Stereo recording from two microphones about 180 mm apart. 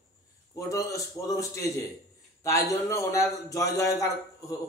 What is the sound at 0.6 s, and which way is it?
A man's voice, 20° left (ahead or behind).